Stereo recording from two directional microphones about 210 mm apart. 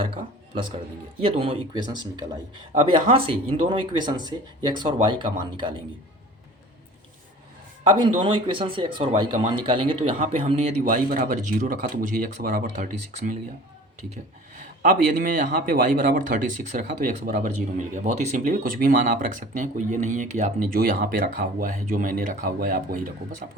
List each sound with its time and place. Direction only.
0.0 s speech: 25° right (ahead or behind)
8.2 s speech: 25° right (ahead or behind); by 13.3 s 40° right (ahead or behind)
14.8 s speech: 40° right (ahead or behind)